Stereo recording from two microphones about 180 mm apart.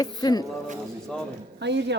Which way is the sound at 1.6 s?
75° right (ahead or behind).